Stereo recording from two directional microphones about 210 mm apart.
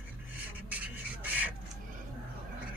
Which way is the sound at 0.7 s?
5° right (ahead or behind).